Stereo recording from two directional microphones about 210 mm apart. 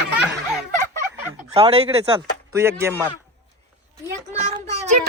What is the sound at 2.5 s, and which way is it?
Speech, 10° right (ahead or behind).